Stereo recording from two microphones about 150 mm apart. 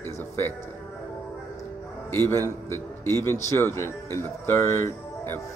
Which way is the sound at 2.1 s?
15° left (ahead or behind).